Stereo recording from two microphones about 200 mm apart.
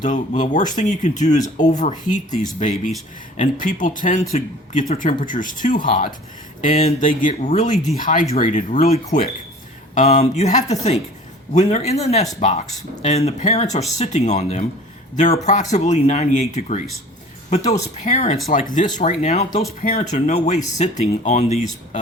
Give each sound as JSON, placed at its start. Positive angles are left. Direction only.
{"t": 0.0, "sound": "speech", "side_deg": 40}